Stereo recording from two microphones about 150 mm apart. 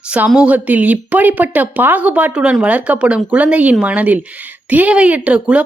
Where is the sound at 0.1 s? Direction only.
5° right (ahead or behind).